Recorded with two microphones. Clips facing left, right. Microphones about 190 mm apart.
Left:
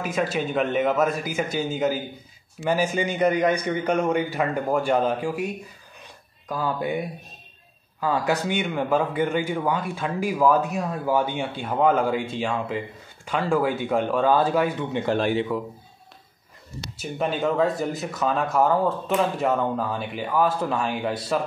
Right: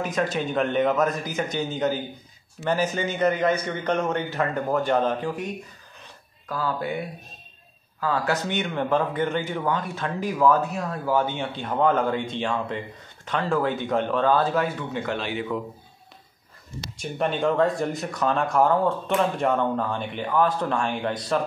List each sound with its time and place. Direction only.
0.0 s speech: 5° left (ahead or behind)
6.5 s speech: 15° left (ahead or behind)
8.0 s speech: 15° left (ahead or behind)
16.9 s speech: 5° left (ahead or behind)